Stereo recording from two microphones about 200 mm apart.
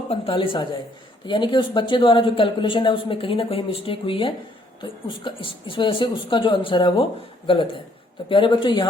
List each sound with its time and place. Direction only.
0.1 s speech: 25° left (ahead or behind)